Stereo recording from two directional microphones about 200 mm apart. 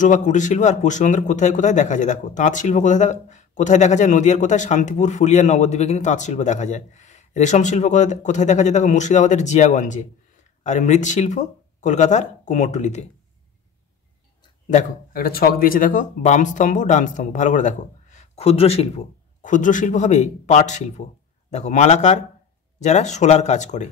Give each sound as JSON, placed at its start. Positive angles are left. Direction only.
{"t": 0.0, "sound": "speech", "side_deg": 40}
{"t": 14.7, "sound": "speech", "side_deg": 40}